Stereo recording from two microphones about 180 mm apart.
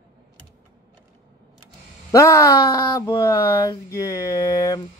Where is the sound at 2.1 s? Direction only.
20° left (ahead or behind).